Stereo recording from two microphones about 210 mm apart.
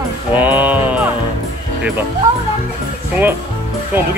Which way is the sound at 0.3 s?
5° right (ahead or behind).